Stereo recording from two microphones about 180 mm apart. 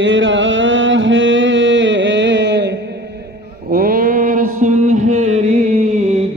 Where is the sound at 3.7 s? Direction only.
55° right (ahead or behind).